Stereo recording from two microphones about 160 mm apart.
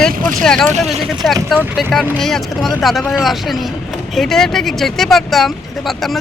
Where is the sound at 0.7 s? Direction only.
45° right (ahead or behind).